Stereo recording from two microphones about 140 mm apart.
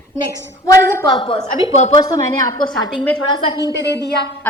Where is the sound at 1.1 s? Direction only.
35° left (ahead or behind).